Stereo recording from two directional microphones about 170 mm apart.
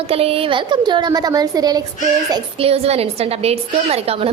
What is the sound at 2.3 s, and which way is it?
A woman's voice, 35° right (ahead or behind).